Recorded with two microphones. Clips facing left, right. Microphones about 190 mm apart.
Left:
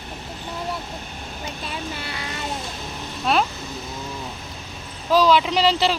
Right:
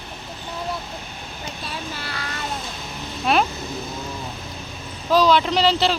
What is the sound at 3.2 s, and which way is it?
Vehicle, centre (ahead or behind).